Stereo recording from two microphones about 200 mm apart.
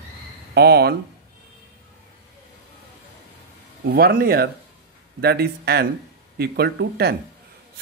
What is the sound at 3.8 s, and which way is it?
Speech, 50° right (ahead or behind).